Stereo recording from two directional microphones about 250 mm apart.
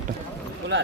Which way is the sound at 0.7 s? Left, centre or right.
Right.